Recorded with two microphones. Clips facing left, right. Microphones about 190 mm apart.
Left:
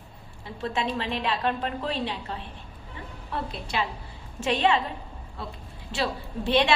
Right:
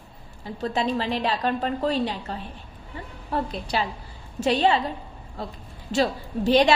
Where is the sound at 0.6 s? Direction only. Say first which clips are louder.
Right 4 dB; 35° right (ahead or behind).